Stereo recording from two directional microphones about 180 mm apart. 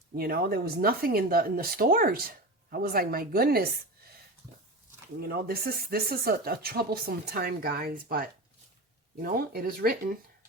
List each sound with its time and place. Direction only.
0.2 s speech: 55° right (ahead or behind)
5.2 s speech: 55° right (ahead or behind)
9.2 s speech: 55° right (ahead or behind)